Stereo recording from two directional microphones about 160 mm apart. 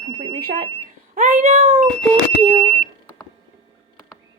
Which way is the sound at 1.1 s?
55° right (ahead or behind).